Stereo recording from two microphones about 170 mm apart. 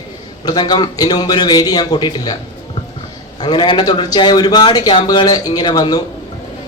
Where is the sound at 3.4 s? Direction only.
25° left (ahead or behind).